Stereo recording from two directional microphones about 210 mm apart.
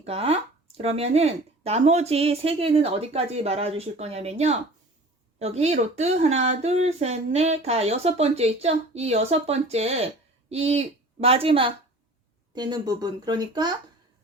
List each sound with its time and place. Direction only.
0.0 s a woman's voice: 30° right (ahead or behind)